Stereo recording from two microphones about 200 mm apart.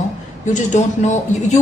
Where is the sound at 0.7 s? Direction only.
35° left (ahead or behind).